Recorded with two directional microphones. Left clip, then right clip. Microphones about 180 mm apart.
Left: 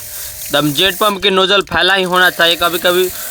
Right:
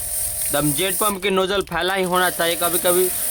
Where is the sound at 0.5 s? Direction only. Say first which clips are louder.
Left 9 dB; 25° left (ahead or behind).